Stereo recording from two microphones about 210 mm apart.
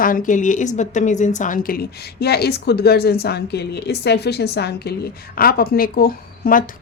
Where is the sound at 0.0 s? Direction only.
40° left (ahead or behind).